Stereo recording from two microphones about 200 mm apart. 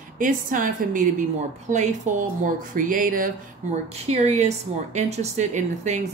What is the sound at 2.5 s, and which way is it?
Speech, 40° right (ahead or behind).